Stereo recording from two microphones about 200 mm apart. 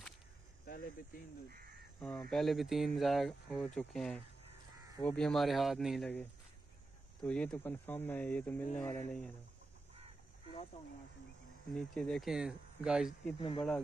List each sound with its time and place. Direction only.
0.7 s speech: 50° left (ahead or behind)
2.0 s speech: 5° left (ahead or behind)
7.2 s speech: 5° left (ahead or behind)
11.7 s speech: 5° left (ahead or behind)
13.4 s speech: 25° left (ahead or behind)